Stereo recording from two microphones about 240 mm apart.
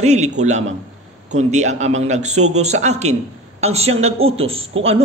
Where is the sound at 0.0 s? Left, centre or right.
Right.